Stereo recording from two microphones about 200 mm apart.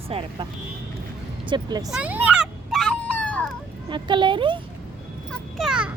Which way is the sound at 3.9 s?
25° right (ahead or behind).